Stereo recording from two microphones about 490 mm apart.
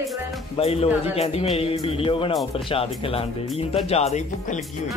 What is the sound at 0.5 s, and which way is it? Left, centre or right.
A man's voice, centre.